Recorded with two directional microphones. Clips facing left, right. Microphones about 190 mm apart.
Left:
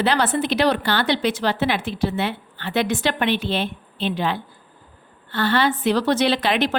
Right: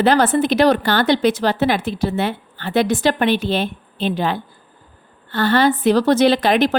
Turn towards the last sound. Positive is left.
turn(degrees=-45)  # may be behind; listen again after turning